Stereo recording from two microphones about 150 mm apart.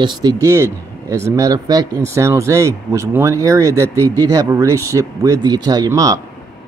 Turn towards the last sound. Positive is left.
turn(degrees=-25)  # may be behind; listen again after turning